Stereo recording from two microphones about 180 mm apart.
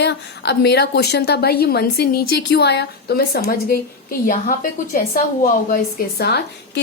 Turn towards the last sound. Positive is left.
turn(degrees=65)  # may be behind; listen again after turning